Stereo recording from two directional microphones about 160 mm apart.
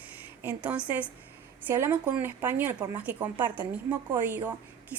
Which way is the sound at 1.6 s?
10° right (ahead or behind).